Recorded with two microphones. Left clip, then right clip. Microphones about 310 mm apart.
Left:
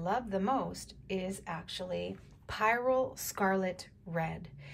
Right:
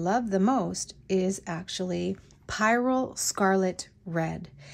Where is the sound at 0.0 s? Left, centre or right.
Right.